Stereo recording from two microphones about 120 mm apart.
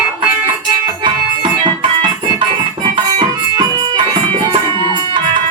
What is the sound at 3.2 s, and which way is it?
Music, 35° right (ahead or behind).